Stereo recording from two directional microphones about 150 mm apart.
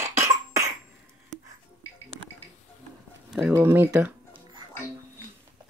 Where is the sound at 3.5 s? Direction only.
15° right (ahead or behind).